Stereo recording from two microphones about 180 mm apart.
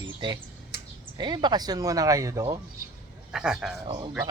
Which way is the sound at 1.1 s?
25° right (ahead or behind).